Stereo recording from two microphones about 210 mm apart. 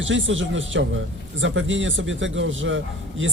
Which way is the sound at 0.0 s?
65° right (ahead or behind).